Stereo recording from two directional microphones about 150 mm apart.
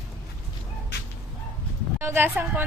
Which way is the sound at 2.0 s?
15° right (ahead or behind).